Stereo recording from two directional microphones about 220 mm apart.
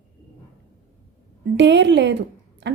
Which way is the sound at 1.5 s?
55° right (ahead or behind).